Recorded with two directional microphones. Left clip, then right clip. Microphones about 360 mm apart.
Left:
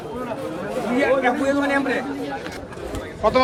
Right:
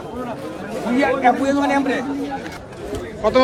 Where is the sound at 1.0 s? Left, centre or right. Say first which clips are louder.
Right 3 dB; centre.